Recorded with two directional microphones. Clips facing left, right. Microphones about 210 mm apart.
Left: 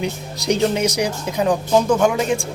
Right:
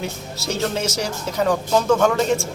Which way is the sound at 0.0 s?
15° left (ahead or behind).